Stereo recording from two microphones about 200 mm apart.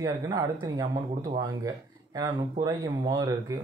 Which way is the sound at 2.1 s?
20° right (ahead or behind).